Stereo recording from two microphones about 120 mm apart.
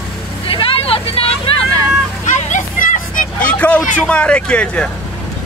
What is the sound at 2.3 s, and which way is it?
Vehicle, 90° left.